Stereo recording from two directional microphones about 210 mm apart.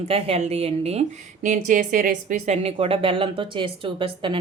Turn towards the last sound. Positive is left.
turn(degrees=-25)  # may be behind; listen again after turning